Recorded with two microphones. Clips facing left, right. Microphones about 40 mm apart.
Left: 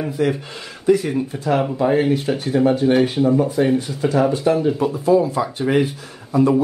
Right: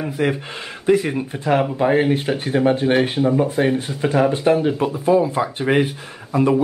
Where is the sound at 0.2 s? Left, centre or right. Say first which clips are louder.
Even; right.